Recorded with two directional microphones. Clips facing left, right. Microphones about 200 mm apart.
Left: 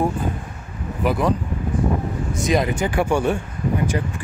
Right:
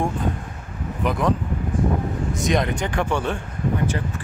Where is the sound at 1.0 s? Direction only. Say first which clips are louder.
Left 2 dB; 5° left (ahead or behind).